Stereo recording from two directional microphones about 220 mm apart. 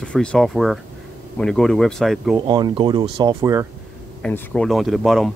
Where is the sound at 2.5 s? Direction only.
20° right (ahead or behind).